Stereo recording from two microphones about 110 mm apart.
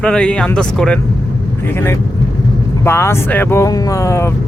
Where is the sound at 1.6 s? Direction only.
20° left (ahead or behind).